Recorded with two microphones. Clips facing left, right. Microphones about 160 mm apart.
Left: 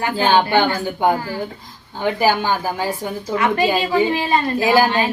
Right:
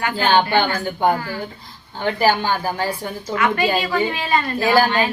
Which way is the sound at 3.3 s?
30° left (ahead or behind).